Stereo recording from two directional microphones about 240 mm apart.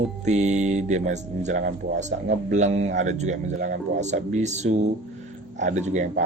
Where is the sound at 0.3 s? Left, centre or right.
Right.